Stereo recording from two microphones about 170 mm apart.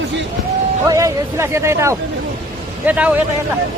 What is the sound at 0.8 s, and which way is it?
Speech, 20° right (ahead or behind).